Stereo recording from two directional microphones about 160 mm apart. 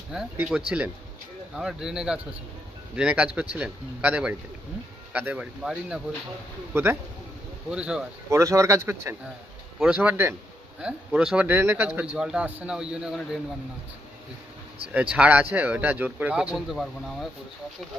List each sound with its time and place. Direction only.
0.4 s speech: 5° right (ahead or behind)
7.7 s speech: 5° right (ahead or behind)
8.3 s speech: 20° right (ahead or behind)
14.9 s speech: 5° right (ahead or behind)